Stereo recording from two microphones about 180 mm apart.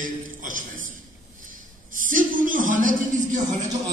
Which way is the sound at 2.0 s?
50° right (ahead or behind).